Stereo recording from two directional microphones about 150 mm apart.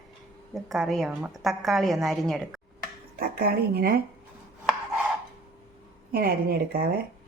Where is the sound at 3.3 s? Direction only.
90° right.